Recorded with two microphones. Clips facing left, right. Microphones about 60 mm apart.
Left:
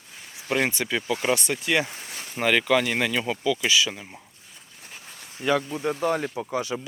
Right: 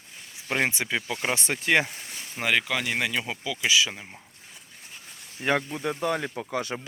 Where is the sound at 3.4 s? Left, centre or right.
Centre.